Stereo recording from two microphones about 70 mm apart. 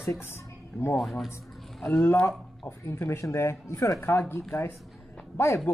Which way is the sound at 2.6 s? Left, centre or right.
Left.